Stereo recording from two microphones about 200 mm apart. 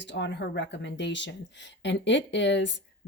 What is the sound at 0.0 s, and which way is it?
Speech, 65° left (ahead or behind).